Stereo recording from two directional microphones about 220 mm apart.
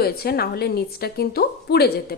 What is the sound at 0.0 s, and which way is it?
Speech, 45° left (ahead or behind).